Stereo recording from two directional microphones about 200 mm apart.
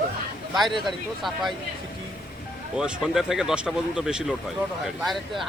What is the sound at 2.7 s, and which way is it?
Speech, 5° right (ahead or behind).